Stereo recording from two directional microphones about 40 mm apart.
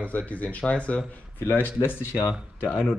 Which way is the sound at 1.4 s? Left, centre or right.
Left.